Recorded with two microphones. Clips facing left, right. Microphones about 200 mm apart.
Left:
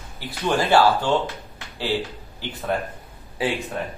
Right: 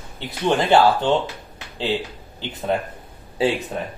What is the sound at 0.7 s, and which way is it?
Speech, 20° right (ahead or behind).